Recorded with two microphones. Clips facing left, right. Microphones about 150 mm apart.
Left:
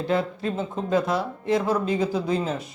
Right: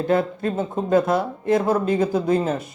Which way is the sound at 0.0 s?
50° right (ahead or behind).